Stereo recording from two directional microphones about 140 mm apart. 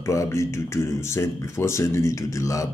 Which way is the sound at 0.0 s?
20° left (ahead or behind).